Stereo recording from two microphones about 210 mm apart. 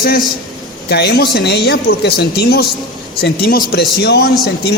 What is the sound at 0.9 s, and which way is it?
Speech, 50° left (ahead or behind).